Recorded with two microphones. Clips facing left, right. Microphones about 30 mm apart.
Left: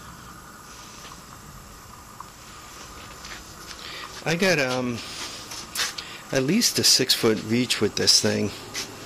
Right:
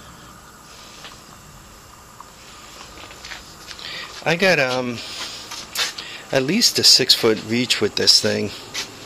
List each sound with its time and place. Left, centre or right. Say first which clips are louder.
2.8 s walk: right 4 dB; right
4.3 s a sound: right 5 dB; right
6.2 s speech: right 4 dB; right